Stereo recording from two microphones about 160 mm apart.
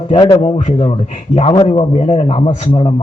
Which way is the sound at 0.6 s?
40° left (ahead or behind).